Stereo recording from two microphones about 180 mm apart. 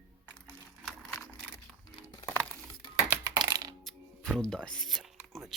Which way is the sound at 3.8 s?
Centre (ahead or behind).